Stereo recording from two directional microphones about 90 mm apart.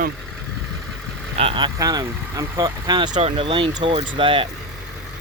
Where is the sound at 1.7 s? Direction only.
45° right (ahead or behind).